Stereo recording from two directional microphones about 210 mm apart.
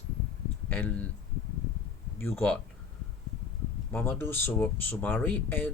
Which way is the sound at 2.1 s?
10° left (ahead or behind).